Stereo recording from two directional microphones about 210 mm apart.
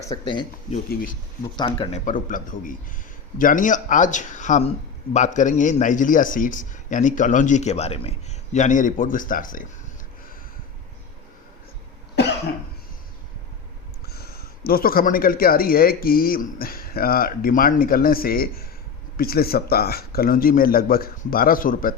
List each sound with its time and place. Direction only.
0.0 s speech: 20° left (ahead or behind)
1.5 s speech: 20° left (ahead or behind)
2.0 s speech: 40° left (ahead or behind)
14.1 s speech: 45° left (ahead or behind)